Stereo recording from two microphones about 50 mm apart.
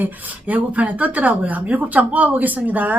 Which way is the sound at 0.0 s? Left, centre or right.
Right.